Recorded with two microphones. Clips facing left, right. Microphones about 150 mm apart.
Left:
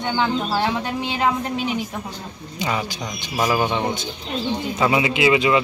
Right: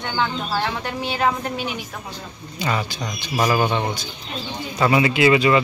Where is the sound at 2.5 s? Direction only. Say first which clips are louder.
Even; 15° left (ahead or behind).